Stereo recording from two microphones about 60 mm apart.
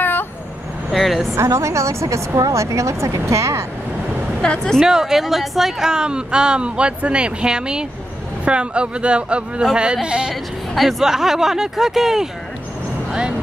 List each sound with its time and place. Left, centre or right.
0.9 s a sound: centre
1.3 s a woman's voice: right
4.4 s speech: centre
4.7 s speech: centre
10.7 s speech: centre